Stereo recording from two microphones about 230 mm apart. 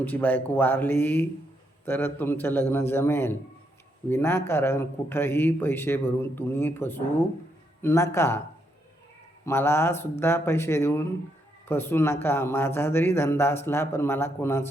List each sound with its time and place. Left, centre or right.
0.0 s speech: centre
9.5 s speech: centre